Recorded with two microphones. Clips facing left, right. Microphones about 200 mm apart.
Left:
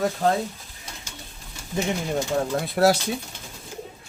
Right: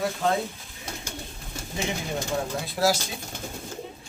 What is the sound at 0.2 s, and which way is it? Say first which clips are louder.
Speech: left 3 dB; 40° left (ahead or behind).